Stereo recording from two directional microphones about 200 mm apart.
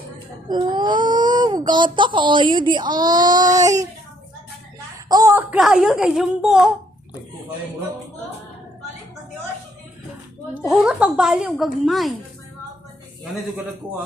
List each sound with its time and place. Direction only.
0.4 s speech: 20° right (ahead or behind)
5.0 s speech: 15° right (ahead or behind)
5.5 s a woman's voice: centre (ahead or behind)
10.6 s a woman's voice: centre (ahead or behind)